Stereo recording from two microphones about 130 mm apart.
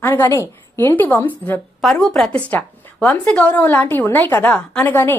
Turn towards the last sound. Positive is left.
turn(degrees=15)  # may be behind; listen again after turning